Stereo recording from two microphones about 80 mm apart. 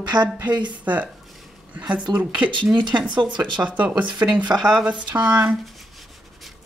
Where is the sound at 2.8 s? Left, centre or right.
Right.